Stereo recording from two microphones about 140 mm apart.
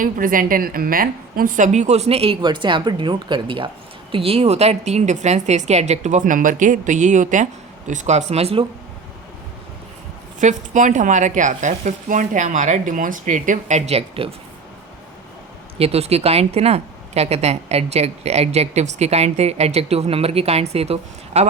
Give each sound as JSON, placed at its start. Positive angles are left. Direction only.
{"t": 0.0, "sound": "a woman's voice", "side_deg": -80}
{"t": 10.4, "sound": "speech", "side_deg": -65}
{"t": 15.8, "sound": "a woman's voice", "side_deg": -45}